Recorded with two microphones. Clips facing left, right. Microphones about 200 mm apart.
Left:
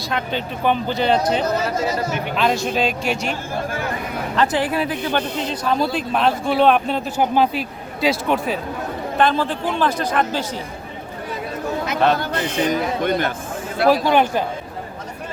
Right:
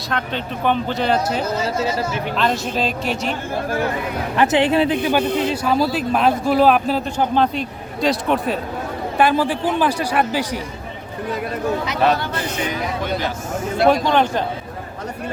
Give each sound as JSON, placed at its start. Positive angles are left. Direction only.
{"t": 0.1, "sound": "a man's voice", "side_deg": 5}
{"t": 1.6, "sound": "speech", "side_deg": -30}
{"t": 2.3, "sound": "a man's voice", "side_deg": 5}
{"t": 4.4, "sound": "speech", "side_deg": -25}
{"t": 5.0, "sound": "a man's voice", "side_deg": -10}
{"t": 9.1, "sound": "a man's voice", "side_deg": -10}
{"t": 12.6, "sound": "speech", "side_deg": 50}
{"t": 13.8, "sound": "a man's voice", "side_deg": 5}